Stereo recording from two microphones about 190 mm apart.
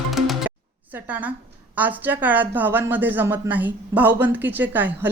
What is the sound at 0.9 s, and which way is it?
A woman's voice, 10° right (ahead or behind).